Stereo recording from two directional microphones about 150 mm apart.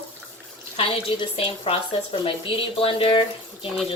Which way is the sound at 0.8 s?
35° left (ahead or behind).